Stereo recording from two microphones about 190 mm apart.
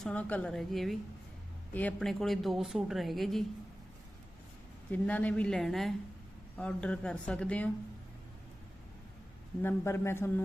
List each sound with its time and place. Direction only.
0.0 s a woman's voice: 5° left (ahead or behind)
4.9 s a woman's voice: 10° left (ahead or behind)
9.6 s speech: 15° left (ahead or behind)